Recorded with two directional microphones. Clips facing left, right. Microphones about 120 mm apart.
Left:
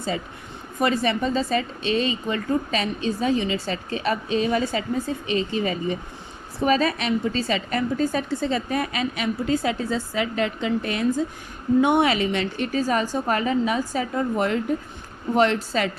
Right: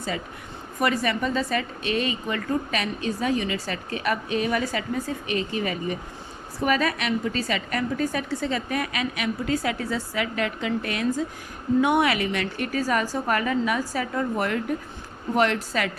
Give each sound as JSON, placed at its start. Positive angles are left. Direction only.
{"t": 0.8, "sound": "a woman's voice", "side_deg": 25}